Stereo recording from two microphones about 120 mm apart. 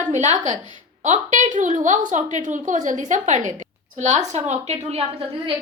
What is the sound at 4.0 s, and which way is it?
Speech, 75° right (ahead or behind).